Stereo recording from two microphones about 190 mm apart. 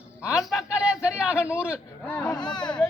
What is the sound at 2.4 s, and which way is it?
Speech, 25° left (ahead or behind).